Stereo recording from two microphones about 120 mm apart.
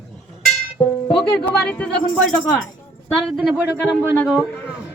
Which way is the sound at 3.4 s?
15° right (ahead or behind).